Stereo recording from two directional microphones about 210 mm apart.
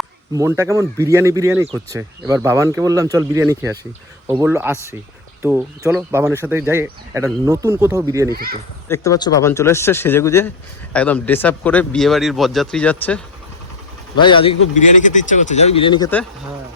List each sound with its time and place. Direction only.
0.3 s speech: 15° right (ahead or behind)
8.3 s speech: 45° right (ahead or behind)
8.9 s speech: 15° left (ahead or behind)
14.2 s speech: 25° left (ahead or behind)
14.8 s speech: 35° left (ahead or behind)